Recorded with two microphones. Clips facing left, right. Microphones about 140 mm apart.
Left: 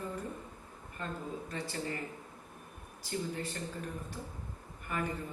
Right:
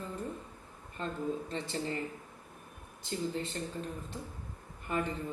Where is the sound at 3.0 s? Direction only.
25° right (ahead or behind).